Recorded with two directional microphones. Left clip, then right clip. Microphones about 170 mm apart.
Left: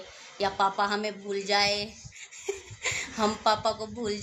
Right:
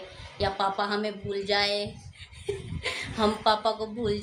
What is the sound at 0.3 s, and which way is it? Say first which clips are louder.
Speech: left 1 dB; 35° left (ahead or behind).